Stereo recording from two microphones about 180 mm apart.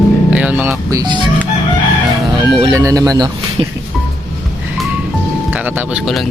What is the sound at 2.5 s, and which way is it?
Speech, 25° right (ahead or behind).